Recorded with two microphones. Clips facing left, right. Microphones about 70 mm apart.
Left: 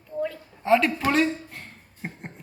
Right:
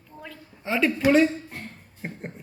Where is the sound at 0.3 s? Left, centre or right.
Centre.